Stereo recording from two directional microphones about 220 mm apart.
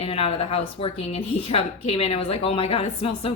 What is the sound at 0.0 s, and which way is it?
A woman's voice, 25° left (ahead or behind).